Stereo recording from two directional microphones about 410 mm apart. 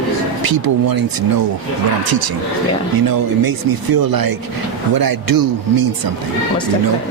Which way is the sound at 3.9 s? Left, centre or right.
Right.